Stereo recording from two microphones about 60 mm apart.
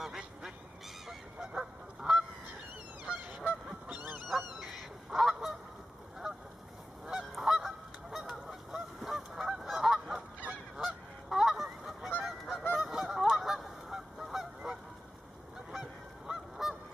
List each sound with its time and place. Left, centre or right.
0.0 s duck: centre
1.0 s goose: centre
3.1 s goose: centre
4.3 s dog: centre
5.1 s goose: centre
7.1 s goose: centre